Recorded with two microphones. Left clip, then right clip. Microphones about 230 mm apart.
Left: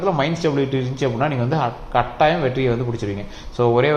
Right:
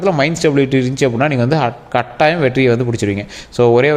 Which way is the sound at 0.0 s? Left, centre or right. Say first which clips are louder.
Right 6 dB; right.